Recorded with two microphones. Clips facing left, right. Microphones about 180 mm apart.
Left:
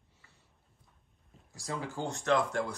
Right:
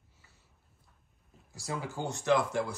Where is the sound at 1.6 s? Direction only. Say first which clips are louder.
Even; 5° right (ahead or behind).